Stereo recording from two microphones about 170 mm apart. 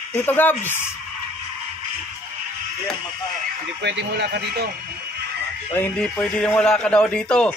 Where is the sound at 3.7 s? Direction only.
85° right.